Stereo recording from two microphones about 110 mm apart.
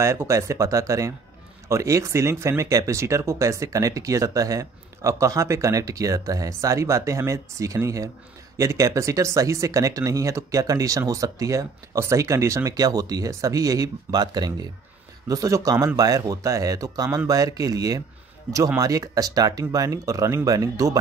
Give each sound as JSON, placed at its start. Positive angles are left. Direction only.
{"t": 0.0, "sound": "speech", "side_deg": -25}